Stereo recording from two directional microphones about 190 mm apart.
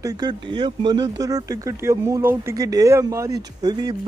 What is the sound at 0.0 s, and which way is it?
Speech, 20° right (ahead or behind).